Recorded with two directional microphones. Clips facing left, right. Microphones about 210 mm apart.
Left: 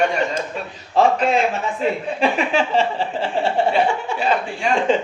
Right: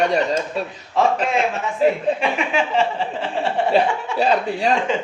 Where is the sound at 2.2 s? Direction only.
30° left (ahead or behind).